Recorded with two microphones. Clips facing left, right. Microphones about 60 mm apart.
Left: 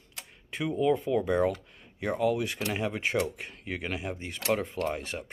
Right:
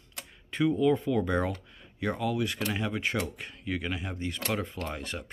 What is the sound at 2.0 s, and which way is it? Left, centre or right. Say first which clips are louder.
Speech: left 2 dB; left.